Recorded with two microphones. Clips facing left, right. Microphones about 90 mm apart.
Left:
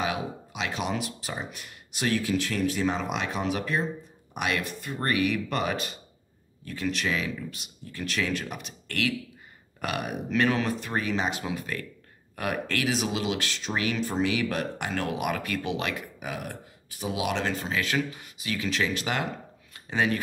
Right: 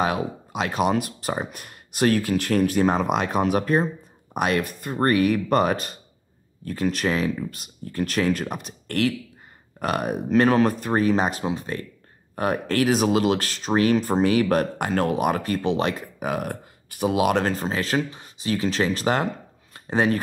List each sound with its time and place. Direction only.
0.0 s speech: 45° right (ahead or behind)
11.4 s speech: 30° right (ahead or behind)
16.3 s speech: 50° right (ahead or behind)
19.7 s a sound: 40° right (ahead or behind)